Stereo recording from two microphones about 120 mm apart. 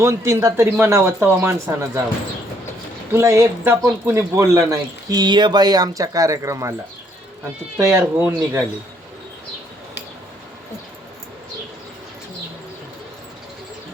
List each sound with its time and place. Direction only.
0.0 s a man's voice: 25° right (ahead or behind)
3.1 s a man's voice: 25° right (ahead or behind)
8.1 s a man's voice: 15° right (ahead or behind)